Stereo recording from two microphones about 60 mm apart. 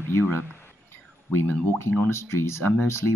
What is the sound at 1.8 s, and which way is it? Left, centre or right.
Speech, left.